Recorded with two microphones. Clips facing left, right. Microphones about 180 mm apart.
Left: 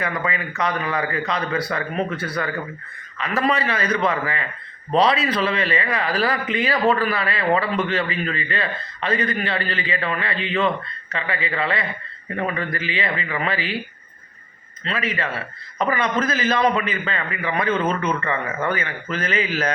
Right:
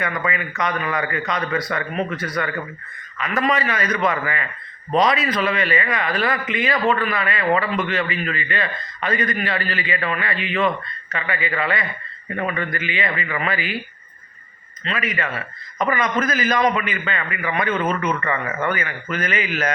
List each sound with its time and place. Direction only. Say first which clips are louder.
0.3 s a man's voice: even; 30° left (ahead or behind)
14.8 s a man's voice: even; 30° left (ahead or behind)